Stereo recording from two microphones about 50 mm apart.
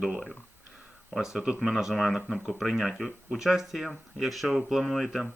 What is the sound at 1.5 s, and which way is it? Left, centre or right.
Speech, centre.